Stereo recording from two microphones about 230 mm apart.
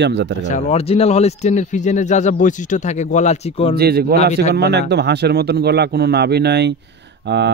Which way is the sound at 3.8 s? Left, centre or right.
Right.